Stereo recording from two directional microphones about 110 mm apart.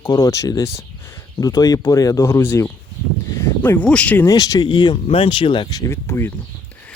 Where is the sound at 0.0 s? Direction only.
30° left (ahead or behind); by 4.3 s 15° left (ahead or behind).